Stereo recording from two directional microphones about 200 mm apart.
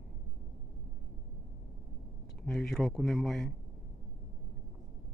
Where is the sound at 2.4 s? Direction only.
Centre (ahead or behind).